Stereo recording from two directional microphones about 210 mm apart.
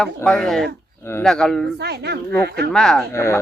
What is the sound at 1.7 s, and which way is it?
Speech, 50° right (ahead or behind).